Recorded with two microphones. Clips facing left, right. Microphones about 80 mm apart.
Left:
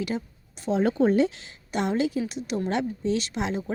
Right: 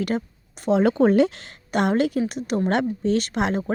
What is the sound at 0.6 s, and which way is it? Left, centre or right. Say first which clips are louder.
Speech: right 4 dB; right.